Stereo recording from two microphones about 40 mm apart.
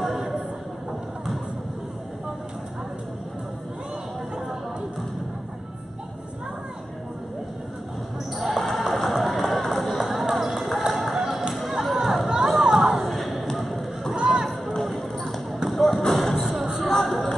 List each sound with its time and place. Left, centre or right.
8.4 s a sound: centre
14.1 s music: centre
14.8 s basketball bounce: centre
16.1 s music: centre
16.3 s music: centre
16.9 s music: centre